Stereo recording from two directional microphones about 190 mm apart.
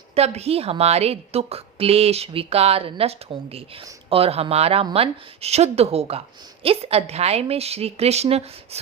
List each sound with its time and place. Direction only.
0.1 s speech: 35° right (ahead or behind)